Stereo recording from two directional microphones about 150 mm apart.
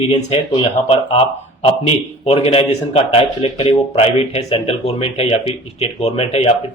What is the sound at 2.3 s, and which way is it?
A man's voice, 40° left (ahead or behind).